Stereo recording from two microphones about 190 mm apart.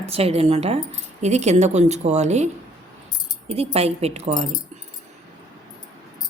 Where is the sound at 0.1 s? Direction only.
30° right (ahead or behind).